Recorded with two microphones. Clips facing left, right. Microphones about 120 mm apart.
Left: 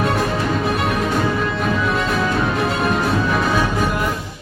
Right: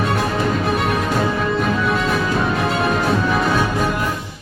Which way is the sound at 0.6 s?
Centre (ahead or behind).